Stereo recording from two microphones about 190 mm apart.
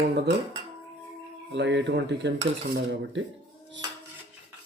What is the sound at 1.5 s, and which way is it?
Speech, 70° right (ahead or behind).